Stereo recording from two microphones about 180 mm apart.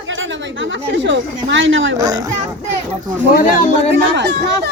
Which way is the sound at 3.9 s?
70° right (ahead or behind).